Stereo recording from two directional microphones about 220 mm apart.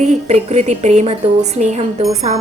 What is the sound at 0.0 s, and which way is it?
A woman's voice, 30° right (ahead or behind).